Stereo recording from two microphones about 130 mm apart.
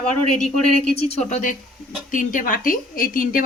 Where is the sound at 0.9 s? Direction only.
55° left (ahead or behind).